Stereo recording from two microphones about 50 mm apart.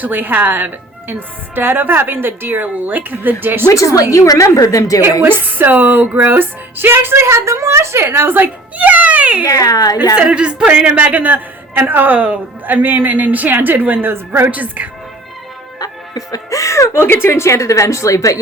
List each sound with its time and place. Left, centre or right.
0.0 s a woman's voice: right
3.7 s a woman's voice: left
5.0 s speech: right
7.3 s a woman's voice: right
8.8 s music: right
10.2 s a man's voice: right
14.1 s speech: right
14.5 s a woman's voice: right
16.5 s a woman's voice: left